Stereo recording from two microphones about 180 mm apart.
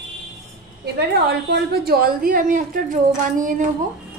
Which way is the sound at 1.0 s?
65° right (ahead or behind).